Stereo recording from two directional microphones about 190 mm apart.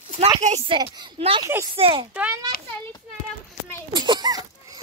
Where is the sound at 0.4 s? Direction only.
40° right (ahead or behind).